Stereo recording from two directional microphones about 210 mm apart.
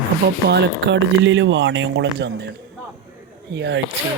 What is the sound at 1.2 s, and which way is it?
Speech, 60° right (ahead or behind).